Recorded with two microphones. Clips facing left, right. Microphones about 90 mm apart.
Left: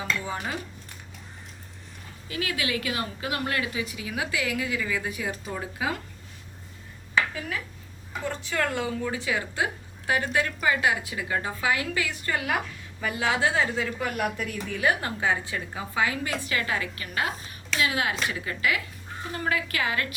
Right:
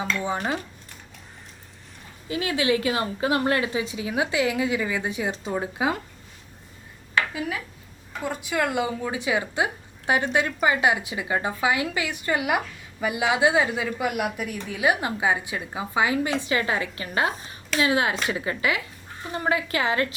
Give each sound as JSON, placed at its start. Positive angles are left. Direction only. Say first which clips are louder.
{"t": 2.3, "sound": "a woman's voice", "louder": "right 6 dB", "side_deg": -25}
{"t": 7.2, "sound": "a woman's voice", "louder": "right 1 dB", "side_deg": -10}